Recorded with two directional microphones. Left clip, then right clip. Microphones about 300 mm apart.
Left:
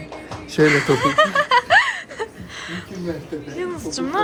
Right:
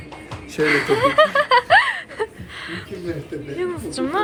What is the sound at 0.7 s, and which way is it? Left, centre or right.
Snicker, centre.